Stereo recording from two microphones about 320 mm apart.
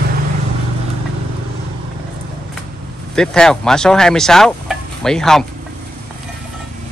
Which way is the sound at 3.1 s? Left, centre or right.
Centre.